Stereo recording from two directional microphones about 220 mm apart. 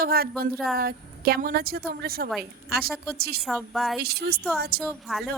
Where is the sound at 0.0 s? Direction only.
45° right (ahead or behind).